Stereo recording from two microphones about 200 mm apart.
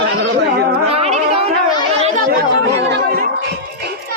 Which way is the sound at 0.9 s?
30° right (ahead or behind).